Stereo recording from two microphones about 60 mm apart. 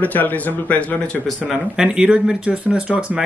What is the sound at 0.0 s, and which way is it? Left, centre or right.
Speech, left.